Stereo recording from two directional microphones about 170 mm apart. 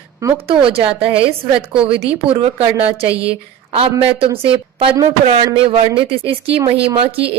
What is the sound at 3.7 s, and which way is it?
A woman's voice, 30° right (ahead or behind).